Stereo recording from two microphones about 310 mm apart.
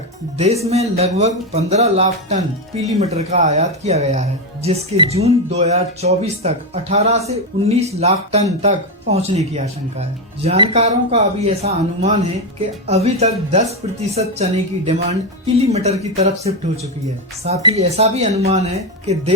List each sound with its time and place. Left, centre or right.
0.3 s speech: centre
14.8 s speech: right